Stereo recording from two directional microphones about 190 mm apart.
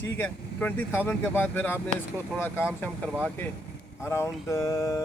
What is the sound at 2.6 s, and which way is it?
Speech, 5° right (ahead or behind).